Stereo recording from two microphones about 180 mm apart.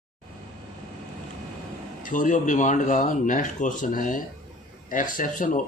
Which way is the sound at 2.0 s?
45° left (ahead or behind).